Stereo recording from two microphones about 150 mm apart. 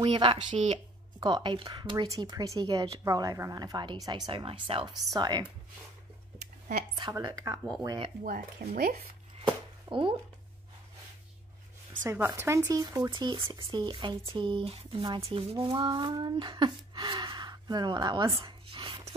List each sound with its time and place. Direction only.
0.0 s speech: 35° right (ahead or behind)
7.0 s speech: 30° right (ahead or behind)
8.2 s speech: 70° right (ahead or behind); by 8.9 s 90° right
9.8 s speech: 35° right (ahead or behind)
12.0 s speech: 15° right (ahead or behind); by 19.1 s 35° right (ahead or behind)